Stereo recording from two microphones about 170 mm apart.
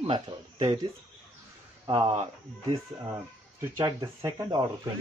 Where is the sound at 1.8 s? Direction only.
30° right (ahead or behind).